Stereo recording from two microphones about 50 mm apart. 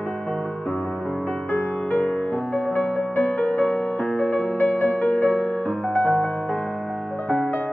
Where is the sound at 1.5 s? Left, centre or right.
Left.